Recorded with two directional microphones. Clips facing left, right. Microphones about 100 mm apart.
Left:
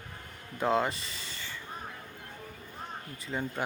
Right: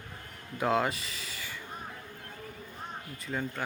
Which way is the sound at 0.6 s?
Centre (ahead or behind).